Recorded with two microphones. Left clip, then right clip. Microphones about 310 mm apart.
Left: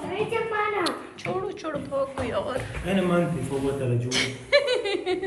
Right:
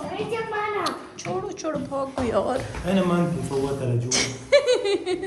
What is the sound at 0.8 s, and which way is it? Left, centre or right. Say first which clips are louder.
Speech: even; centre.